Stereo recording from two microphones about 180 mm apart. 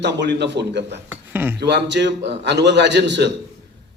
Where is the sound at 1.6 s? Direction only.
70° right (ahead or behind).